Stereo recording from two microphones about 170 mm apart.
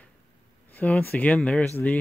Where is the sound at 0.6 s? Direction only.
10° left (ahead or behind).